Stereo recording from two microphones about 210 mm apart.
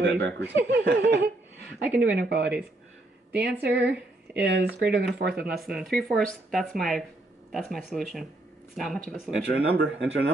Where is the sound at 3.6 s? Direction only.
55° right (ahead or behind).